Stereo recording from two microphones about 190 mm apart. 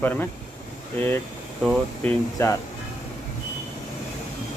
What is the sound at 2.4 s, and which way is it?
Speech, 15° left (ahead or behind).